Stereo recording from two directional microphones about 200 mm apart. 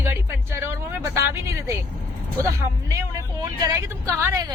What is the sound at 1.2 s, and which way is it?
Speech, 15° right (ahead or behind).